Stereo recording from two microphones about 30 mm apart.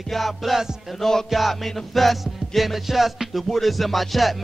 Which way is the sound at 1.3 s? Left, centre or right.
Centre.